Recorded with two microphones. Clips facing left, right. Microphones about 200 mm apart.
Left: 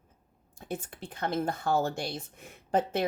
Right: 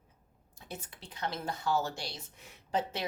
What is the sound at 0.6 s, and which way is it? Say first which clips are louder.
Speech: left 8 dB; 50° left (ahead or behind).